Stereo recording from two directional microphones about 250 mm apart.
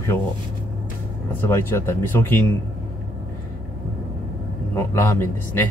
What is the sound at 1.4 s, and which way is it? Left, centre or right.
Speech, centre.